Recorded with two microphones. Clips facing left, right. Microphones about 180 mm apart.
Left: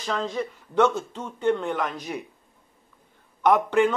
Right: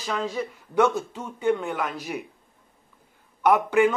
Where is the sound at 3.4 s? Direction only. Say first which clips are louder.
Even; 10° right (ahead or behind).